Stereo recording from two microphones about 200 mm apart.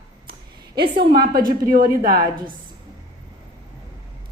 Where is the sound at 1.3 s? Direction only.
45° right (ahead or behind).